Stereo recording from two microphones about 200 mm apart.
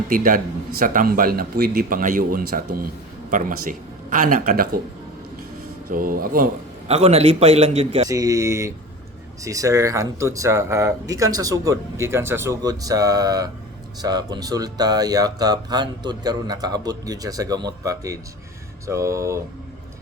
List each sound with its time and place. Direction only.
0.1 s speech: 45° right (ahead or behind)
5.9 s speech: 45° right (ahead or behind)
6.8 s a man's voice: 30° right (ahead or behind)
8.0 s speech: 15° right (ahead or behind)